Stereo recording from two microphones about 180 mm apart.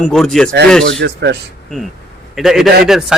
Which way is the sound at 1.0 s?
70° right (ahead or behind).